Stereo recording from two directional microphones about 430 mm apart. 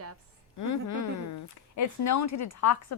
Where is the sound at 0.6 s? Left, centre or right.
Left.